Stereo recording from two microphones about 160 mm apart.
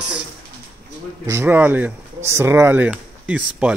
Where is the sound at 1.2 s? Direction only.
15° right (ahead or behind).